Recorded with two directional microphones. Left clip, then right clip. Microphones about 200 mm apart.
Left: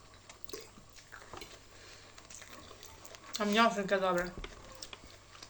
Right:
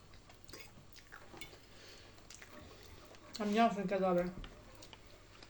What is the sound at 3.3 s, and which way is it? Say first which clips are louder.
Speech: left 4 dB; 10° right (ahead or behind).